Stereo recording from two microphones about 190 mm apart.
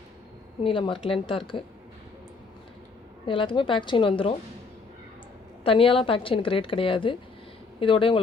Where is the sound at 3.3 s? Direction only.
25° left (ahead or behind).